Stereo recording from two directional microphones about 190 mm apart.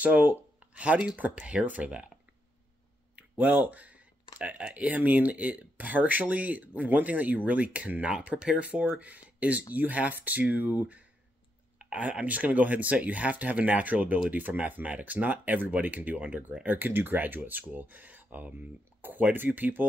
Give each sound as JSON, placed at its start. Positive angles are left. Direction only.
{"t": 0.0, "sound": "speech", "side_deg": -10}
{"t": 3.2, "sound": "a sound", "side_deg": -5}
{"t": 4.4, "sound": "speech", "side_deg": -5}